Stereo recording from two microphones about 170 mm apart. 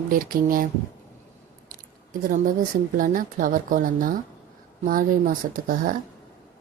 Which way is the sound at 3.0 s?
55° right (ahead or behind).